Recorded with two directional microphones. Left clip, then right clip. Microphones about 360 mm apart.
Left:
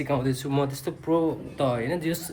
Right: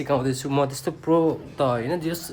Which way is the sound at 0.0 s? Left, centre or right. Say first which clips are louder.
Right 3 dB; centre.